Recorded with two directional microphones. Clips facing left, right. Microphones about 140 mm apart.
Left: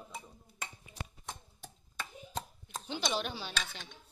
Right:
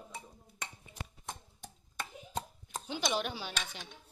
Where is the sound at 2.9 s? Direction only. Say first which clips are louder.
Right 1 dB; 10° right (ahead or behind).